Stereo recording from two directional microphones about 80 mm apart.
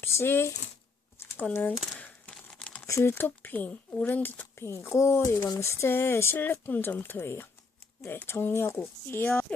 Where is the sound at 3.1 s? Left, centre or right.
Left.